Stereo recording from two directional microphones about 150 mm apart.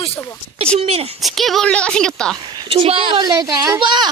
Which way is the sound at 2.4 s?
30° right (ahead or behind).